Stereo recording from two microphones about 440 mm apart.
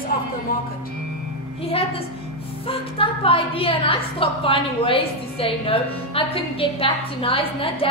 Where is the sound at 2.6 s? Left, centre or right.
Centre.